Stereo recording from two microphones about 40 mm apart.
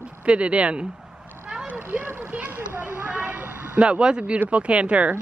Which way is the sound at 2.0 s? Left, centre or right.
Right.